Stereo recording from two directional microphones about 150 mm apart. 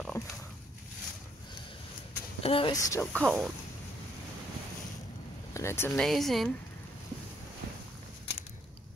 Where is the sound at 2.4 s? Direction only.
40° left (ahead or behind).